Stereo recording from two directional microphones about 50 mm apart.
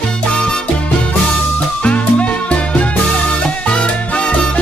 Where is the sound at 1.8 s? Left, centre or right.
Left.